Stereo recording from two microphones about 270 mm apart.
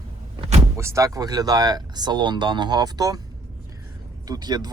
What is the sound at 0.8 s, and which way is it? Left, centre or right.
Speech, centre.